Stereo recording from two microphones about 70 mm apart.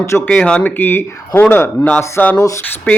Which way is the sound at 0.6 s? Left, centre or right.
Left.